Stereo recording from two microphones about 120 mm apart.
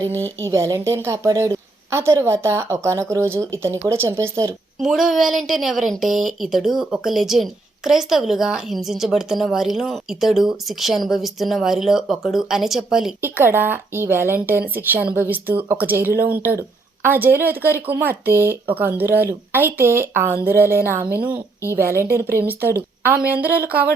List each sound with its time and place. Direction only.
0.4 s a woman's voice: 25° right (ahead or behind)
4.8 s a woman's voice: centre (ahead or behind)
13.2 s a woman's voice: 20° right (ahead or behind)